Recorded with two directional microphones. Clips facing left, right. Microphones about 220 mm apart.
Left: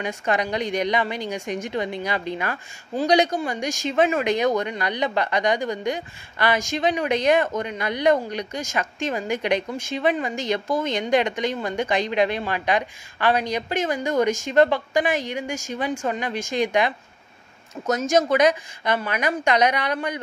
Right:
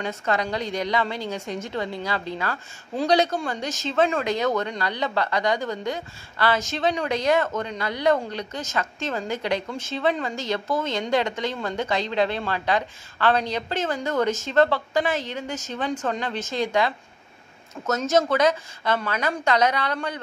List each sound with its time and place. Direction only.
0.0 s speech: 15° left (ahead or behind)